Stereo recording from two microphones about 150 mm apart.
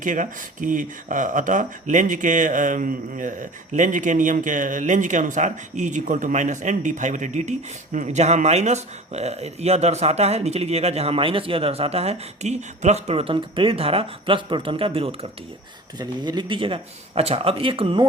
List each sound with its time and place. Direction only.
0.0 s speech: 60° right (ahead or behind); by 15.3 s 40° right (ahead or behind)
16.0 s speech: 30° right (ahead or behind)